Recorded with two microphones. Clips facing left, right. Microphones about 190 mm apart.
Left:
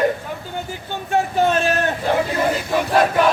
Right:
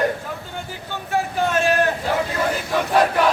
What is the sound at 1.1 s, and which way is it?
Speech, 25° left (ahead or behind).